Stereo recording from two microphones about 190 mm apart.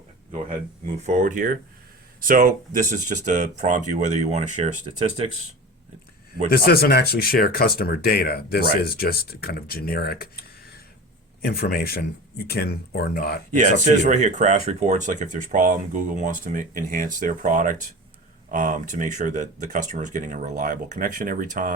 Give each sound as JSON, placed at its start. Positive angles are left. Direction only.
{"t": 1.0, "sound": "speech", "side_deg": -45}
{"t": 6.5, "sound": "speech", "side_deg": 50}
{"t": 11.4, "sound": "speech", "side_deg": 55}
{"t": 13.6, "sound": "speech", "side_deg": -40}